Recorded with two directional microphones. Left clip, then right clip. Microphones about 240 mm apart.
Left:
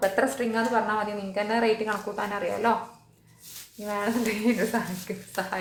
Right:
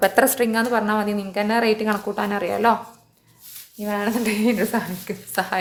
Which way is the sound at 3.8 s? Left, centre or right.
Right.